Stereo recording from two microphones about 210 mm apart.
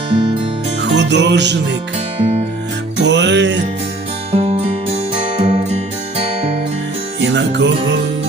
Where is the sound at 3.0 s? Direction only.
55° right (ahead or behind).